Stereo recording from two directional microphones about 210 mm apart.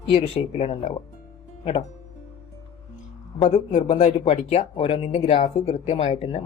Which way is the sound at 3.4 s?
30° left (ahead or behind).